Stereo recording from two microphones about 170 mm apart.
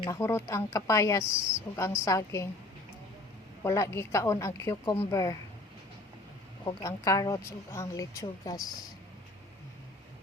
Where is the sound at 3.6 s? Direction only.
15° left (ahead or behind).